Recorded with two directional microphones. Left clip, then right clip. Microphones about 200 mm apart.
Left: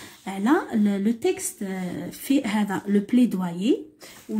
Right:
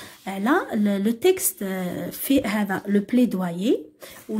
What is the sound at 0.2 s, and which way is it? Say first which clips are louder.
Speech: right 1 dB; 20° right (ahead or behind).